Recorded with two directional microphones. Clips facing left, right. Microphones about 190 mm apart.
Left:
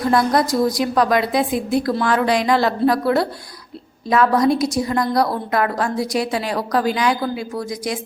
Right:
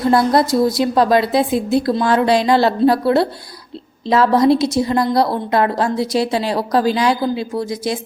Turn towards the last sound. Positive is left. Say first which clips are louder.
# right 4 dB
turn(degrees=-25)  # may be behind; listen again after turning